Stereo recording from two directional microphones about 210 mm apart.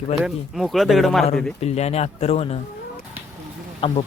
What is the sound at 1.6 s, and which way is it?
Speech, 30° left (ahead or behind).